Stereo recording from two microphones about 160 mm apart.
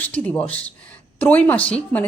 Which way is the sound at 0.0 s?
10° left (ahead or behind).